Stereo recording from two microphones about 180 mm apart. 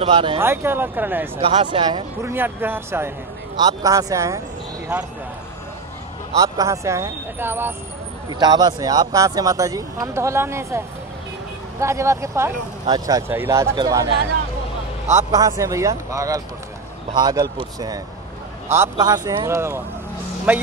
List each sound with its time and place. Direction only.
0.0 s speech: 30° right (ahead or behind)
0.4 s speech: 15° right (ahead or behind)
1.4 s speech: 30° right (ahead or behind)
2.2 s speech: 10° right (ahead or behind)
6.3 s speech: 20° right (ahead or behind)
8.3 s speech: 20° right (ahead or behind)
11.8 s speech: 15° right (ahead or behind)
15.3 s speech: 20° right (ahead or behind)